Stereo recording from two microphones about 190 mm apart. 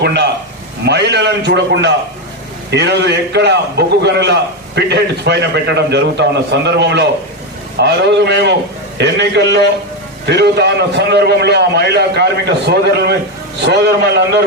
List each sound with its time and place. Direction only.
0.0 s a man's voice: 60° right (ahead or behind)